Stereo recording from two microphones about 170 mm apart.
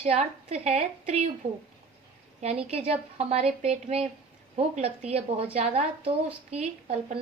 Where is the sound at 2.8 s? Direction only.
40° right (ahead or behind).